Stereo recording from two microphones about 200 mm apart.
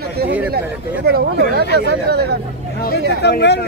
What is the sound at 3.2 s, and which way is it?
Speech, 55° left (ahead or behind).